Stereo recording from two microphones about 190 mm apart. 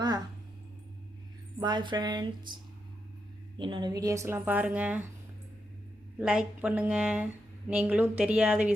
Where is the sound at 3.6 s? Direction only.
25° right (ahead or behind); by 5.0 s 5° right (ahead or behind).